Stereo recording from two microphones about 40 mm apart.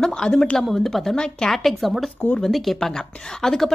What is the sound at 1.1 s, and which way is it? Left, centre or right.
Speech, centre.